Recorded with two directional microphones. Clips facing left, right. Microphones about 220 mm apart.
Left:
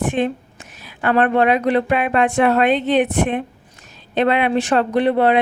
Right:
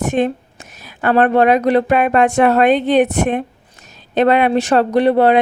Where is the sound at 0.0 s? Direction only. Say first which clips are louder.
Right 3 dB; 45° right (ahead or behind).